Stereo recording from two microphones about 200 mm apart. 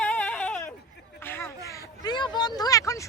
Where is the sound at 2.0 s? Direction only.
20° left (ahead or behind).